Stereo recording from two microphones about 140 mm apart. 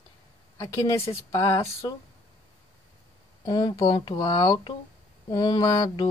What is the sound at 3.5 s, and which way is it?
Speech, 30° left (ahead or behind).